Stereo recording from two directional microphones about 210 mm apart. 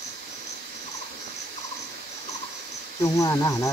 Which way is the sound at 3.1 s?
15° left (ahead or behind).